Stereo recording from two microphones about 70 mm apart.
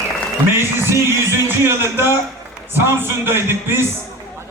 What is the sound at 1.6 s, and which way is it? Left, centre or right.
A man's voice, right.